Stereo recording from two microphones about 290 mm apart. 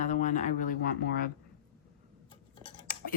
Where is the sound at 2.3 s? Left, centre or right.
Centre.